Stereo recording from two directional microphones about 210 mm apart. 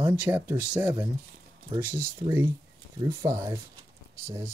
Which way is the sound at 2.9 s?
10° right (ahead or behind).